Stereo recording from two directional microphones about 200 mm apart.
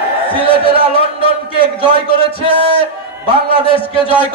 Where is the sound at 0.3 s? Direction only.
25° left (ahead or behind).